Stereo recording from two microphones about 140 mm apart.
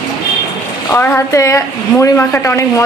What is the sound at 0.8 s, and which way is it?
A woman's voice, 15° left (ahead or behind).